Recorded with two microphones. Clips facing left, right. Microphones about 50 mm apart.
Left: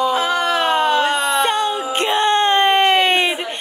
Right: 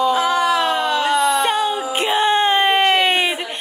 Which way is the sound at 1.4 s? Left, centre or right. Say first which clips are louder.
Even; centre.